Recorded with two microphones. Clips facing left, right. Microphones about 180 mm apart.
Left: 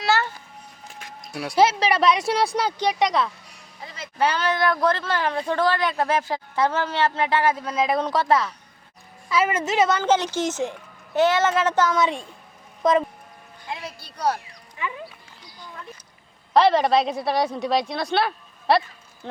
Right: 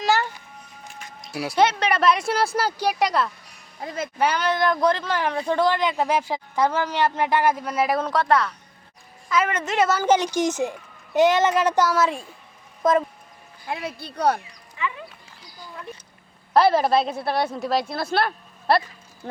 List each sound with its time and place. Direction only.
0.0 s music: 15° right (ahead or behind)
1.2 s speech: centre (ahead or behind)
3.8 s speech: 50° right (ahead or behind)
4.2 s speech: 15° right (ahead or behind)
13.7 s speech: 55° right (ahead or behind)
16.6 s speech: 5° right (ahead or behind)